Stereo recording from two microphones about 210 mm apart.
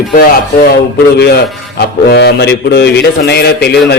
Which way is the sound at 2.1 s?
50° left (ahead or behind).